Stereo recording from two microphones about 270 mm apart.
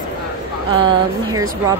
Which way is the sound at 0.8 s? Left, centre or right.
Centre.